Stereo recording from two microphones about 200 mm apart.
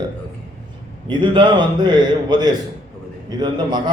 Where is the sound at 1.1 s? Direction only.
25° right (ahead or behind).